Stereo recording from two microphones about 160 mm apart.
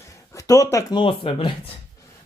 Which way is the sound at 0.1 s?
20° left (ahead or behind).